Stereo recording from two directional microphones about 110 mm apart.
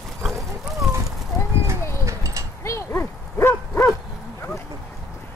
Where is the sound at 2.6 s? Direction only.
25° left (ahead or behind).